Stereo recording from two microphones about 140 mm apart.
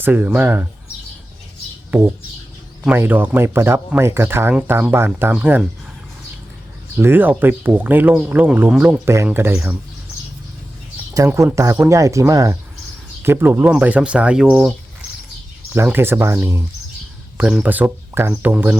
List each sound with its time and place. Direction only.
0.0 s speech: 10° right (ahead or behind)
2.8 s speech: 15° right (ahead or behind)
7.0 s speech: 15° right (ahead or behind)
11.3 s speech: 15° right (ahead or behind)
15.7 s speech: 15° right (ahead or behind)